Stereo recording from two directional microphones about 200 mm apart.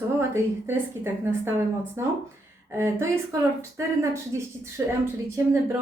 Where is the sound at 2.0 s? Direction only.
15° right (ahead or behind).